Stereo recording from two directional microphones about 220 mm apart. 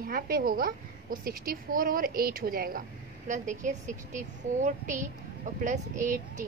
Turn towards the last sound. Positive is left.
turn(degrees=-35)  # may be behind; listen again after turning